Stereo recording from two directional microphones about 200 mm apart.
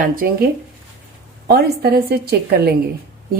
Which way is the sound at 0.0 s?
45° right (ahead or behind).